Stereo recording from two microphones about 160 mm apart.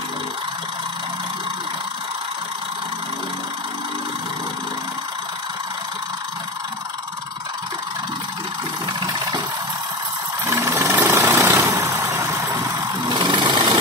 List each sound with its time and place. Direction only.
9.0 s engine: 25° right (ahead or behind)
10.4 s vehicle: 15° right (ahead or behind)